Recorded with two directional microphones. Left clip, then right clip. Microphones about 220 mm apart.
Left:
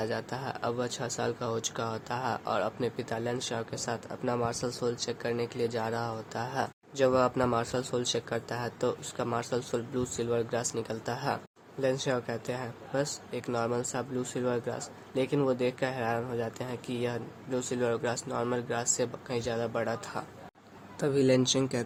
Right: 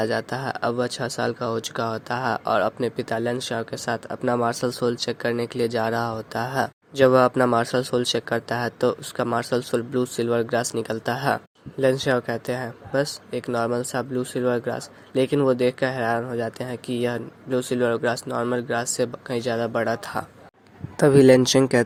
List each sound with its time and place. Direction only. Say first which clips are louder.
0.0 s speech: right 9 dB; 30° right (ahead or behind)
21.0 s speech: right 12 dB; 40° right (ahead or behind)